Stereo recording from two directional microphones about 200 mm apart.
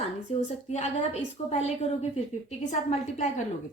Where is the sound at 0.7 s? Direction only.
35° left (ahead or behind).